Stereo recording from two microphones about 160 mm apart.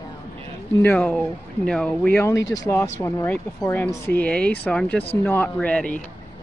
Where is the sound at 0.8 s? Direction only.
10° left (ahead or behind).